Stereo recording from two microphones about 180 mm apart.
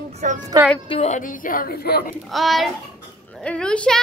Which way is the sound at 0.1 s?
45° right (ahead or behind).